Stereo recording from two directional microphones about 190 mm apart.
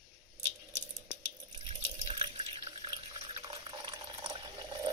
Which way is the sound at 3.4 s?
25° right (ahead or behind).